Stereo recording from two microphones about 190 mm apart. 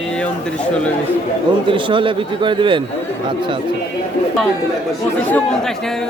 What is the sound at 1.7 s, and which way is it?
Speech, 25° right (ahead or behind).